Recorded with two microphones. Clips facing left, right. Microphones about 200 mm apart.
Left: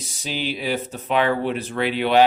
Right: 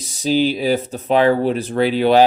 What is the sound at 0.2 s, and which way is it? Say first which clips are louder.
Speech: right 11 dB; 35° right (ahead or behind).